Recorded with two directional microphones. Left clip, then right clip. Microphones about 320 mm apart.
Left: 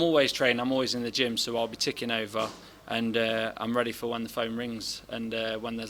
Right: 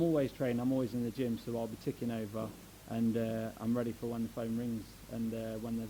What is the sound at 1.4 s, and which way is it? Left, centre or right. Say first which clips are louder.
Speech: left 10 dB; left.